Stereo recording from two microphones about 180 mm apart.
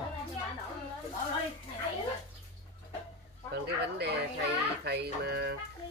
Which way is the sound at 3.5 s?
65° right (ahead or behind).